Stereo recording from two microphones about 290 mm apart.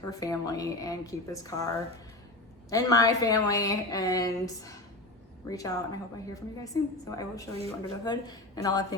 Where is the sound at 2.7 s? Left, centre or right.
Centre.